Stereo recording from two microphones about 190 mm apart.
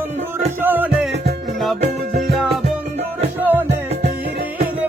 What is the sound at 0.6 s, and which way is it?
Music, 10° right (ahead or behind).